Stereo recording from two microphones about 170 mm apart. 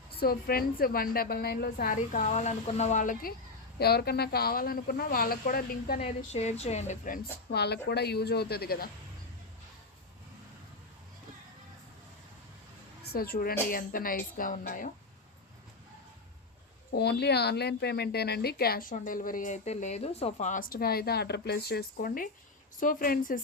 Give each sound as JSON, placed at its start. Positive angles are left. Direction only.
{"t": 0.2, "sound": "speech", "side_deg": 65}
{"t": 3.8, "sound": "speech", "side_deg": 70}
{"t": 6.0, "sound": "a woman's voice", "side_deg": 40}
{"t": 7.5, "sound": "a woman's voice", "side_deg": 75}
{"t": 13.0, "sound": "a woman's voice", "side_deg": 65}
{"t": 16.9, "sound": "a woman's voice", "side_deg": 75}